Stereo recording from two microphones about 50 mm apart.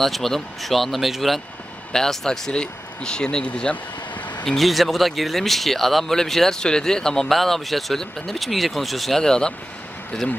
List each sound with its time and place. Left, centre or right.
0.0 s speech: centre
1.9 s speech: centre
4.6 s speech: centre
9.2 s speech: centre